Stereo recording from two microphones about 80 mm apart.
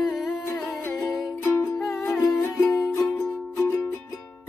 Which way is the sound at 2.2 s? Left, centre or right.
Left.